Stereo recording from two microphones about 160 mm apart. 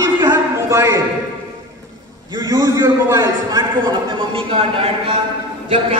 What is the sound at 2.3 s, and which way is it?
A man's voice, 25° right (ahead or behind).